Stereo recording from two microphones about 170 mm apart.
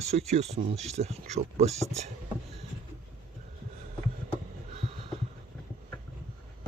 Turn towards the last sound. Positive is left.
turn(degrees=-35)  # may be behind; listen again after turning